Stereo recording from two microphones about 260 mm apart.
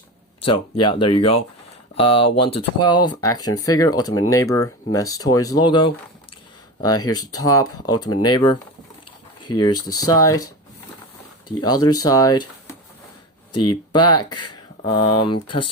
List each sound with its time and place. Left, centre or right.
0.4 s speech: centre
9.6 s speech: centre
13.5 s speech: left
14.8 s speech: centre